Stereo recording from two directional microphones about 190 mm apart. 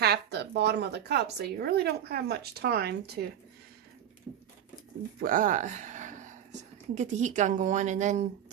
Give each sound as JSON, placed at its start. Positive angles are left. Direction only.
{"t": 0.0, "sound": "a woman's voice", "side_deg": -60}
{"t": 5.2, "sound": "speech", "side_deg": -45}